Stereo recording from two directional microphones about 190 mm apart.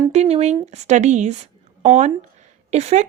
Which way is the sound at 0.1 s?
35° right (ahead or behind).